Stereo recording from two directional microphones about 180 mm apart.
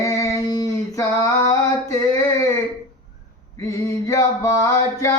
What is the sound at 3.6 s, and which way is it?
Male singing, 15° left (ahead or behind).